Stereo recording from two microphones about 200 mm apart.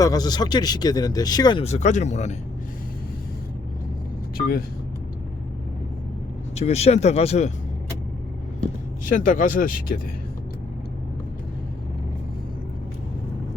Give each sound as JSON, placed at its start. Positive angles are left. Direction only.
{"t": 0.0, "sound": "speech", "side_deg": 20}
{"t": 4.4, "sound": "speech", "side_deg": 45}
{"t": 6.6, "sound": "speech", "side_deg": 30}
{"t": 9.0, "sound": "speech", "side_deg": 40}